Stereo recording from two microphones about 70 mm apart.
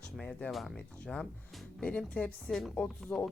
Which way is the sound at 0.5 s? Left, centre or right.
Centre.